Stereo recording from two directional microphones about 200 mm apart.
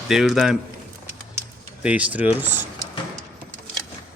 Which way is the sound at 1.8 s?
5° right (ahead or behind).